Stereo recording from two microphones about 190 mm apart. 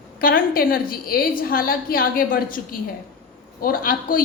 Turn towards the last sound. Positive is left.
turn(degrees=50)  # may be behind; listen again after turning